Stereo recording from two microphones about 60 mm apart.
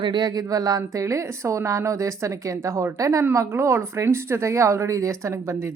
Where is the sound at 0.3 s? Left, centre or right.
Right.